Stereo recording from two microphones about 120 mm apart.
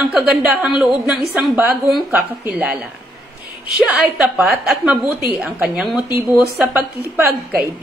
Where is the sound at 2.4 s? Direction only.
15° right (ahead or behind).